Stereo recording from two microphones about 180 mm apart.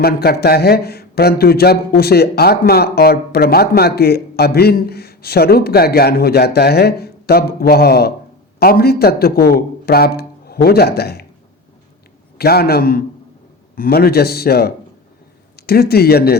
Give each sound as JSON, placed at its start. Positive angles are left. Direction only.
{"t": 0.0, "sound": "speech", "side_deg": 60}
{"t": 12.4, "sound": "speech", "side_deg": 60}